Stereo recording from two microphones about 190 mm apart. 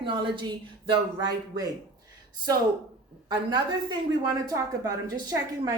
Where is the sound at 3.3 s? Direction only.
20° right (ahead or behind).